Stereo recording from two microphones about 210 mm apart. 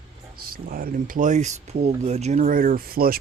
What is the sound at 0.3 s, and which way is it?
Speech, 45° right (ahead or behind).